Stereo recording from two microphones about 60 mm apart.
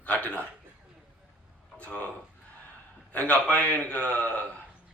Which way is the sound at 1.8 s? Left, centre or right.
Left.